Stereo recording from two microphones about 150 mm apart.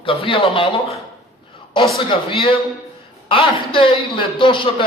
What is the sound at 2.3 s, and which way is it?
Speech, 35° left (ahead or behind).